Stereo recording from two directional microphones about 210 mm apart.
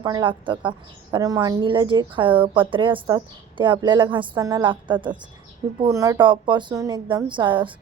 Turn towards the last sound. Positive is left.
turn(degrees=-25)  # may be behind; listen again after turning